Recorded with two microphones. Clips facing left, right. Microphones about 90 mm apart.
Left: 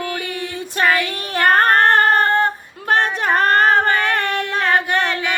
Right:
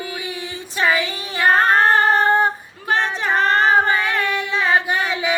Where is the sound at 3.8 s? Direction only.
55° left (ahead or behind).